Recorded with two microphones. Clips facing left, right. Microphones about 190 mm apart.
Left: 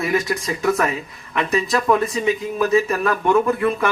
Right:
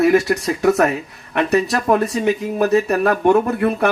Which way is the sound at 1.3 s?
70° right (ahead or behind).